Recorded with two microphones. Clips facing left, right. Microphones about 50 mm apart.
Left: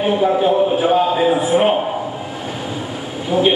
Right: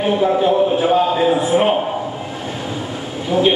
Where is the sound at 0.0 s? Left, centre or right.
Centre.